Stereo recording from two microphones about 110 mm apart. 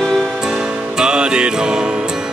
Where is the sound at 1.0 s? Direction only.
10° right (ahead or behind).